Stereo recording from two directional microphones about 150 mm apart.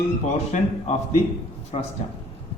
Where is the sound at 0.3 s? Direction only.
45° left (ahead or behind).